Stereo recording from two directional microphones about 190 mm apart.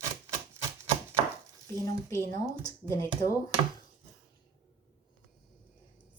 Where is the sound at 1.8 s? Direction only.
15° left (ahead or behind).